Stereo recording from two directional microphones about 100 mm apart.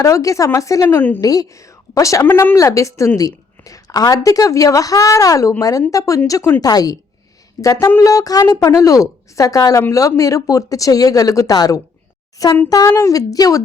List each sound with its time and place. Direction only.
0.0 s a woman's voice: 35° left (ahead or behind)
0.9 s speech: 20° left (ahead or behind)
1.2 s a woman's voice: 35° left (ahead or behind)
2.2 s speech: 20° left (ahead or behind)
2.6 s a woman's voice: 30° left (ahead or behind)